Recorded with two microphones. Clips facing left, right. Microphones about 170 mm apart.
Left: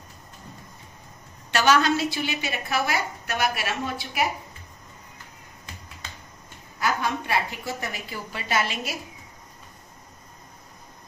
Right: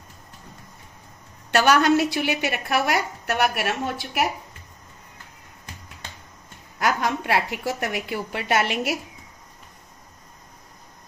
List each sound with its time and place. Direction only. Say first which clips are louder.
1.5 s a woman's voice: right 3 dB; 60° right (ahead or behind)
6.8 s a woman's voice: right 3 dB; 75° right (ahead or behind)